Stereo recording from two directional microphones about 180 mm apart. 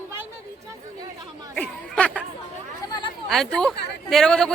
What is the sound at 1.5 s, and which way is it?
Speech, 5° left (ahead or behind).